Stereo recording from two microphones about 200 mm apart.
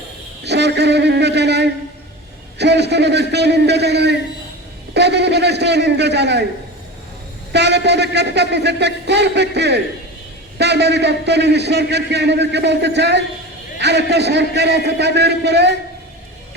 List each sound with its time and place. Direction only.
0.4 s a man's voice: 60° right (ahead or behind)
7.5 s a man's voice: 60° right (ahead or behind)